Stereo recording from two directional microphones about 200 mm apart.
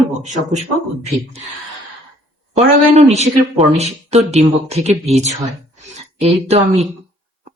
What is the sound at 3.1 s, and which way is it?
Speech, 35° right (ahead or behind).